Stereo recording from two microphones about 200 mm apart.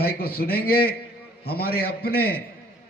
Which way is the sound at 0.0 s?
50° left (ahead or behind).